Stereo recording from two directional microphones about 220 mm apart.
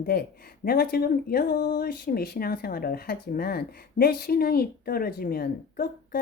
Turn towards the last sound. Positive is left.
turn(degrees=45)  # may be behind; listen again after turning